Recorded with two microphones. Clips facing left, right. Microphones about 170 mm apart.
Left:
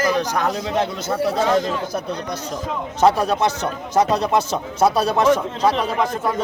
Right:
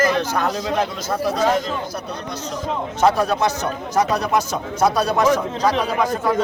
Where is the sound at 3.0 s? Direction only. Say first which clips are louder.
Left 1 dB; 30° left (ahead or behind).